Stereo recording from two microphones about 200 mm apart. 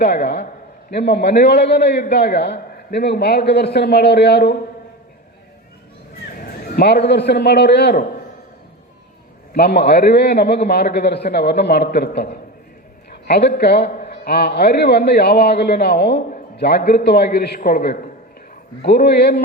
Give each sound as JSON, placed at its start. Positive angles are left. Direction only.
{"t": 0.0, "sound": "a man's voice", "side_deg": 55}
{"t": 6.3, "sound": "a man's voice", "side_deg": 50}
{"t": 9.5, "sound": "a man's voice", "side_deg": 55}